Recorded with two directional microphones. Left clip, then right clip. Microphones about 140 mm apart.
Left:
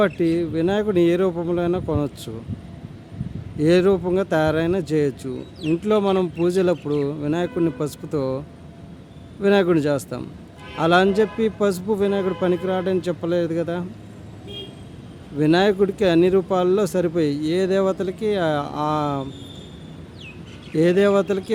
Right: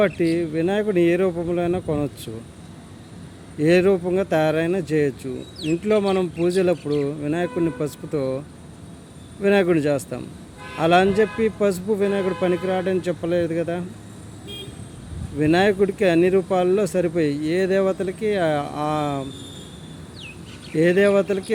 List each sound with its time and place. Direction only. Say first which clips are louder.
0.0 s a man's voice: even; 20° left (ahead or behind)
3.6 s speech: even; 15° left (ahead or behind)
5.2 s a man's voice: even; 35° left (ahead or behind)
9.4 s a man's voice: left 1 dB; 15° left (ahead or behind)
15.4 s speech: even; 15° left (ahead or behind)
20.7 s speech: even; 20° left (ahead or behind)